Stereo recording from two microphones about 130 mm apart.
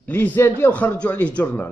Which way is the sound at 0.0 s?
15° left (ahead or behind).